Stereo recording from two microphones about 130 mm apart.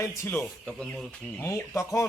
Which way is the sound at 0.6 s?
10° left (ahead or behind).